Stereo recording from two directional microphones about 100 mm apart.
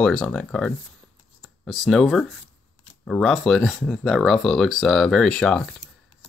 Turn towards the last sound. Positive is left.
turn(degrees=10)  # may be behind; listen again after turning